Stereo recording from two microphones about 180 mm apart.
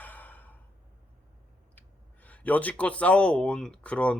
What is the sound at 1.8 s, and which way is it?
Speech, 10° left (ahead or behind).